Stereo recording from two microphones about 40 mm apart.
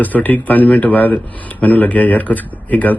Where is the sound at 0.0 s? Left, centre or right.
Left.